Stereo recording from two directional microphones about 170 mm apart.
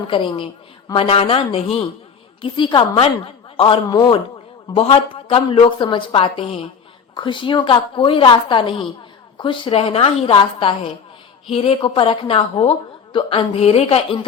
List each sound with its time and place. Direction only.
0.1 s a woman's voice: 30° left (ahead or behind)
3.8 s a woman's voice: 25° left (ahead or behind)
4.7 s a woman's voice: 35° left (ahead or behind)